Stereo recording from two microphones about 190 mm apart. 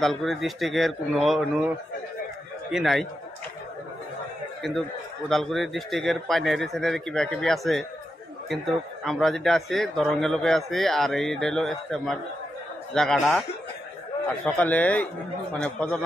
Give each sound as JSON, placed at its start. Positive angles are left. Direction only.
{"t": 0.0, "sound": "a man's voice", "side_deg": 0}
{"t": 2.7, "sound": "a man's voice", "side_deg": 0}
{"t": 4.6, "sound": "a man's voice", "side_deg": 0}